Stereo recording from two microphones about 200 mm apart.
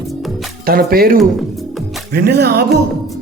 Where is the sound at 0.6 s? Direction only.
50° right (ahead or behind).